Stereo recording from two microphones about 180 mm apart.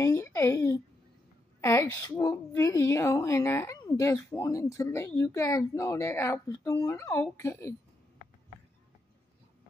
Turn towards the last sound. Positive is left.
turn(degrees=15)  # may be behind; listen again after turning